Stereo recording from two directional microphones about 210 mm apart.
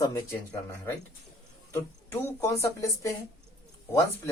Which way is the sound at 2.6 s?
15° left (ahead or behind).